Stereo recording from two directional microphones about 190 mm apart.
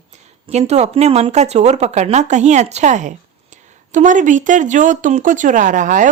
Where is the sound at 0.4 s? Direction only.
35° right (ahead or behind).